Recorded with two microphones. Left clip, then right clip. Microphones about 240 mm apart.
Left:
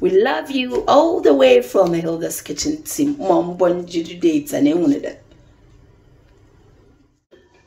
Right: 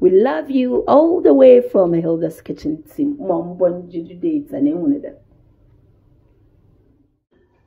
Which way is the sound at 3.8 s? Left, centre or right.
Centre.